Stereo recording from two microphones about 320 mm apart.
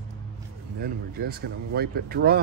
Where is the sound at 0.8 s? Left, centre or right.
Right.